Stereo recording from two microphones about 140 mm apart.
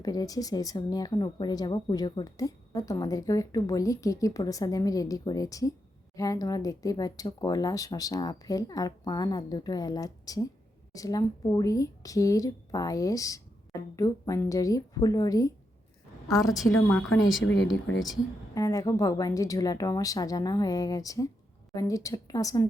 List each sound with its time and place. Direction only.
0.0 s speech: 25° left (ahead or behind)
17.7 s speech: 25° left (ahead or behind)